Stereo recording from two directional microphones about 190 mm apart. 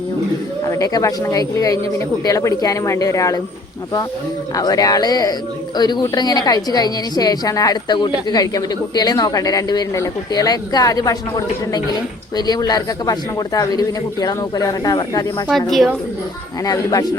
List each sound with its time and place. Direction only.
0.6 s speech: 20° left (ahead or behind)
4.5 s a woman's voice: 20° left (ahead or behind)
15.4 s a woman's voice: centre (ahead or behind)
16.6 s a woman's voice: 20° left (ahead or behind)